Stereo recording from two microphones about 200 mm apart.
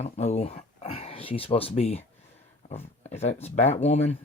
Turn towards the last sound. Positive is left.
turn(degrees=30)  # may be behind; listen again after turning